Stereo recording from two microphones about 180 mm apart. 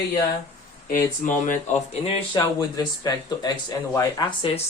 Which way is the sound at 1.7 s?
35° left (ahead or behind).